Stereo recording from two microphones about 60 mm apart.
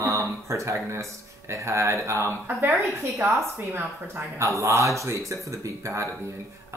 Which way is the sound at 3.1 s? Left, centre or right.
Right.